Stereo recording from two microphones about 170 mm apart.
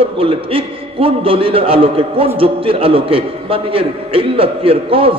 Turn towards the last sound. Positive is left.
turn(degrees=-30)  # may be behind; listen again after turning